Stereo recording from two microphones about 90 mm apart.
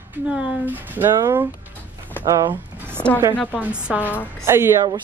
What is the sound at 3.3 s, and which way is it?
Speech, 15° left (ahead or behind).